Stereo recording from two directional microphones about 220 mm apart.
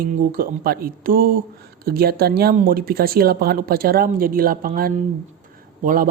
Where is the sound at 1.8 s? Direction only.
45° right (ahead or behind).